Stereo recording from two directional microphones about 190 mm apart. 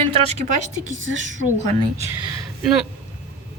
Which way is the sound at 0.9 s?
90° right.